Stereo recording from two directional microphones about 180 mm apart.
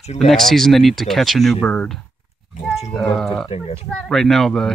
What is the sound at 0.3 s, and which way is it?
Speech, centre (ahead or behind).